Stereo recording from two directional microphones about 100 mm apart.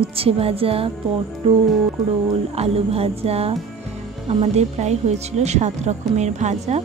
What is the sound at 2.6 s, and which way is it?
Speech, 80° right.